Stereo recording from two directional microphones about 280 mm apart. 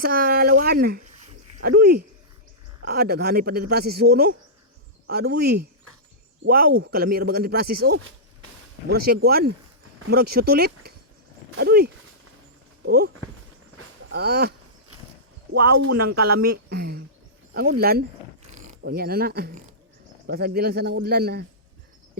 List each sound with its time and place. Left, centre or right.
0.0 s speech: right
8.9 s speech: right
13.7 s a sound: right
15.9 s speech: right